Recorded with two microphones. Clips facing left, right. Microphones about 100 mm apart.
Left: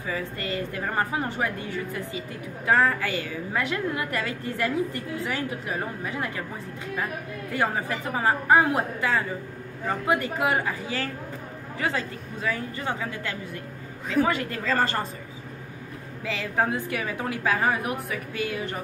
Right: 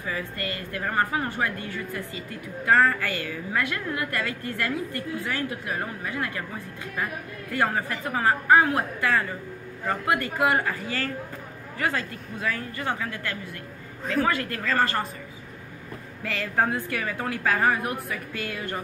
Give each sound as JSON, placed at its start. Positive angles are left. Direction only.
{"t": 0.1, "sound": "a woman's voice", "side_deg": 20}
{"t": 7.5, "sound": "a woman's voice", "side_deg": 15}
{"t": 16.3, "sound": "a woman's voice", "side_deg": 20}